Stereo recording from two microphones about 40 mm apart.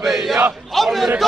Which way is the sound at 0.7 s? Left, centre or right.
Centre.